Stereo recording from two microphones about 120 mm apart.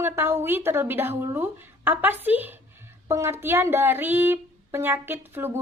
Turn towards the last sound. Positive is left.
turn(degrees=-20)  # may be behind; listen again after turning